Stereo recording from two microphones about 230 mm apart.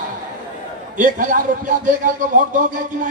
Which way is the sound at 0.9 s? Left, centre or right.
Right.